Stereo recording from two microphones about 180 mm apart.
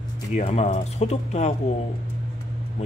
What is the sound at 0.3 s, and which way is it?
Speech, 40° left (ahead or behind).